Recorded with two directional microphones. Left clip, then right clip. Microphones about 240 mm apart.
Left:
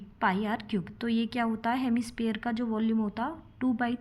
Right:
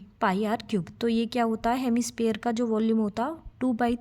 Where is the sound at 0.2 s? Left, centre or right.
Right.